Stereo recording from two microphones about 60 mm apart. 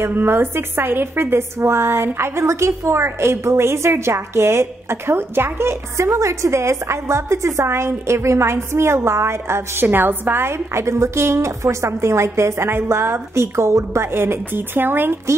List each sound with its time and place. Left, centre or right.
0.0 s a woman's voice: right